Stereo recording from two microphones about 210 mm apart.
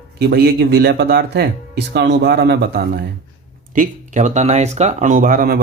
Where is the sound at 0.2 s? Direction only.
50° right (ahead or behind).